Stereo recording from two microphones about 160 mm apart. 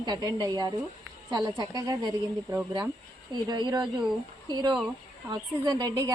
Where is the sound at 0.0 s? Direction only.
25° right (ahead or behind).